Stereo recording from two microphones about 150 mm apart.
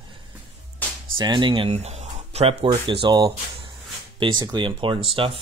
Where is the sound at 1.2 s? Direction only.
30° right (ahead or behind).